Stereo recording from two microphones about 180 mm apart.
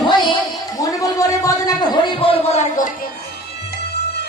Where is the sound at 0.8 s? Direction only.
20° left (ahead or behind).